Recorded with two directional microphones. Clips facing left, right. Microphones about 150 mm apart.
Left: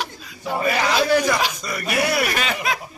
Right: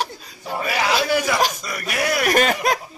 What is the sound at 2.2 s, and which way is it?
Speech, 45° right (ahead or behind).